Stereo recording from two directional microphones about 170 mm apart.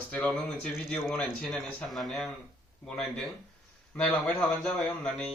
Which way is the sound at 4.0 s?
5° left (ahead or behind).